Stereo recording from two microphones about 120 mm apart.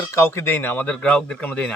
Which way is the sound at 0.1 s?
20° left (ahead or behind).